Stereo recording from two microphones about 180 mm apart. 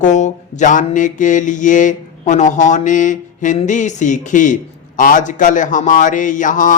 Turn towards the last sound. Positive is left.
turn(degrees=45)  # may be behind; listen again after turning